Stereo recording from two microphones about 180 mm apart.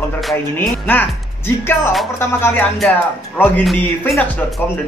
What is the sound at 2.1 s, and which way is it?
Speech, 10° left (ahead or behind).